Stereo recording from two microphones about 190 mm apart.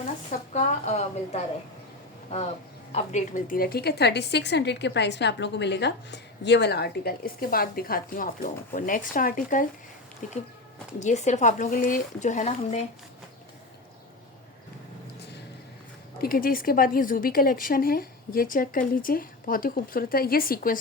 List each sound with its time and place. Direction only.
0.3 s a woman's voice: 40° left (ahead or behind)
2.9 s a woman's voice: 35° left (ahead or behind)
16.2 s a woman's voice: 50° left (ahead or behind)